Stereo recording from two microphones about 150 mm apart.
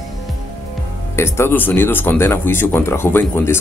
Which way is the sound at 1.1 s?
15° left (ahead or behind).